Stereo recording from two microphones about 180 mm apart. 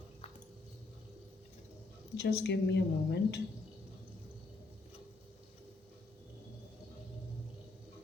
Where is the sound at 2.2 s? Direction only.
70° left (ahead or behind).